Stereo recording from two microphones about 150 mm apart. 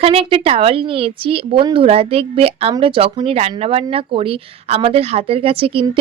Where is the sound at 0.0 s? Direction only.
40° right (ahead or behind).